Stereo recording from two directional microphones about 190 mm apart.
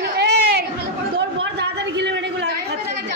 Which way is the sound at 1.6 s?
65° right (ahead or behind).